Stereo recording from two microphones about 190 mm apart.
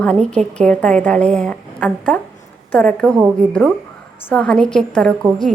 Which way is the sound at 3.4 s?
40° right (ahead or behind).